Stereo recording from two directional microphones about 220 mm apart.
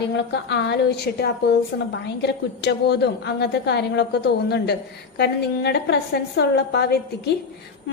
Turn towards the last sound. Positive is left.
turn(degrees=50)  # may be behind; listen again after turning